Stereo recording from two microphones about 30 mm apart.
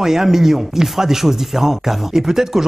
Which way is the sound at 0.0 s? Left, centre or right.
Centre.